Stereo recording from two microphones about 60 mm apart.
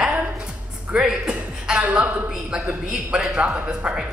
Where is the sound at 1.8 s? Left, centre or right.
Right.